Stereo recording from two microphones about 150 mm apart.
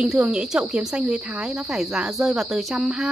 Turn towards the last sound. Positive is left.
turn(degrees=-5)  # may be behind; listen again after turning